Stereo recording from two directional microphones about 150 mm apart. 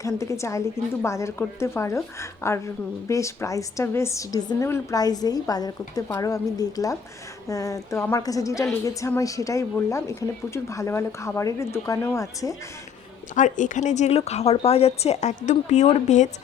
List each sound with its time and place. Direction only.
0.0 s a woman's voice: 20° left (ahead or behind)
13.3 s speech: 55° left (ahead or behind)